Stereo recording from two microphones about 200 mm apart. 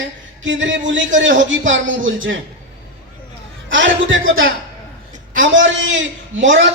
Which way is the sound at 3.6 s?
70° right (ahead or behind).